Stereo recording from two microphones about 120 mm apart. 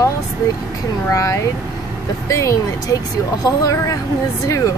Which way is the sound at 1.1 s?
25° left (ahead or behind).